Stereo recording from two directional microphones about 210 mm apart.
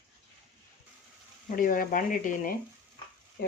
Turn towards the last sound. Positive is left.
turn(degrees=45)  # may be behind; listen again after turning